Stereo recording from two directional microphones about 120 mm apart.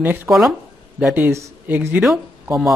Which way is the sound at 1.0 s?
15° right (ahead or behind).